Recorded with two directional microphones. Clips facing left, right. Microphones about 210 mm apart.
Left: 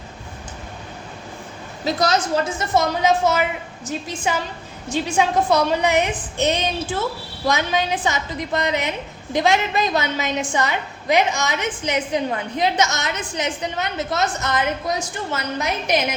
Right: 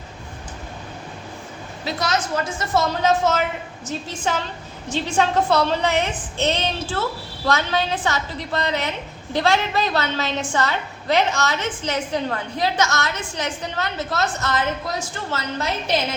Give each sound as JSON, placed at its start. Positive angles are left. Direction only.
{"t": 1.8, "sound": "a woman's voice", "side_deg": 35}
{"t": 2.7, "sound": "a woman's voice", "side_deg": 15}